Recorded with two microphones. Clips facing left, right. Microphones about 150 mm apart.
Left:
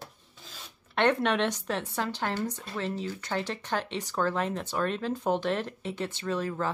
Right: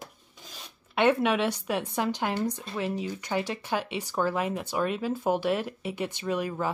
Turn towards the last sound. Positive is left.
turn(degrees=-15)  # may be behind; listen again after turning